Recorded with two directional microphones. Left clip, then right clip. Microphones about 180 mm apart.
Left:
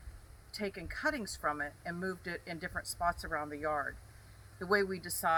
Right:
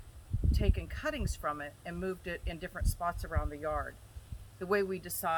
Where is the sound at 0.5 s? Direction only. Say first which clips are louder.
Even; 20° right (ahead or behind).